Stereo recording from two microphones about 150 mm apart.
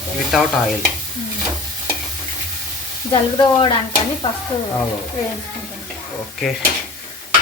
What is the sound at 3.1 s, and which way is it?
Speech, 30° left (ahead or behind).